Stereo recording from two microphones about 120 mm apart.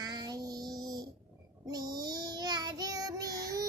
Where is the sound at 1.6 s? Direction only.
35° right (ahead or behind).